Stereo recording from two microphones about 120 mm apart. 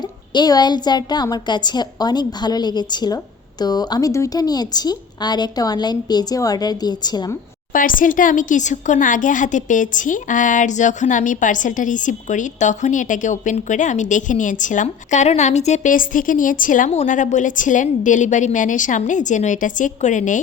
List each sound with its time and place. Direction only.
0.0 s a woman's voice: 35° left (ahead or behind)
7.7 s speech: 90° left